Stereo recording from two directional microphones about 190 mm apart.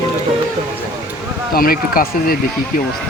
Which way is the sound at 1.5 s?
50° left (ahead or behind).